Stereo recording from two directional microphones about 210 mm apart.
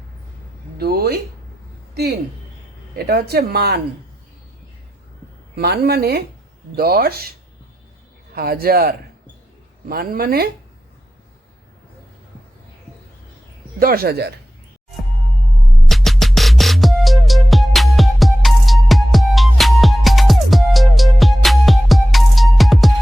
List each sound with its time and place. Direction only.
0.8 s speech: 50° right (ahead or behind)
2.9 s speech: 50° right (ahead or behind)
5.5 s speech: 50° right (ahead or behind)
13.7 s speech: 45° right (ahead or behind)
15.9 s music: centre (ahead or behind)